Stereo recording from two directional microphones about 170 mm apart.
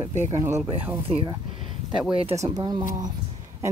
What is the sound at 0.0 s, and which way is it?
Speech, 40° right (ahead or behind).